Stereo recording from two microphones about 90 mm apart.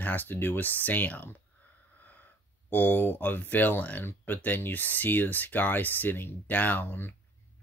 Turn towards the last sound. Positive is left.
turn(degrees=25)  # may be behind; listen again after turning